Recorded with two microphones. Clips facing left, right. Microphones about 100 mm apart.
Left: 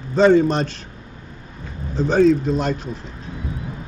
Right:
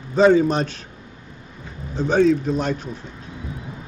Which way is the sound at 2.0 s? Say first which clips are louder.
Left 2 dB; centre (ahead or behind).